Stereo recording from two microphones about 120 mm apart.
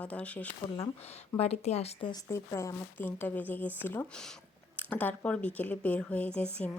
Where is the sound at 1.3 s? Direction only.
60° left (ahead or behind).